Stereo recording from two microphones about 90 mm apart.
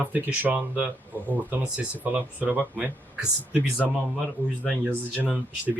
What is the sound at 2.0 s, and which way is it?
Speech, 20° right (ahead or behind).